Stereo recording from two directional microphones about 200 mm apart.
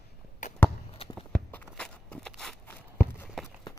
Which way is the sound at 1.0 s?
30° left (ahead or behind).